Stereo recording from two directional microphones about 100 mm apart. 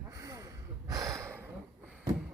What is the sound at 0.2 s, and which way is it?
Snort, 35° right (ahead or behind).